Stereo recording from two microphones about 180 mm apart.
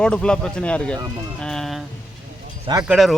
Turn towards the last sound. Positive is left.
turn(degrees=0)  # may be behind; listen again after turning